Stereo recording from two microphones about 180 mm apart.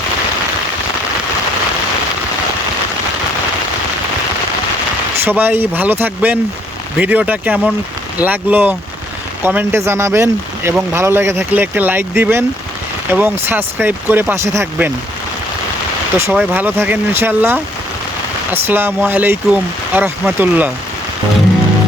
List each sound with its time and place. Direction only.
5.2 s speech: 10° right (ahead or behind)
16.2 s speech: 10° right (ahead or behind)
18.7 s speech: 10° right (ahead or behind)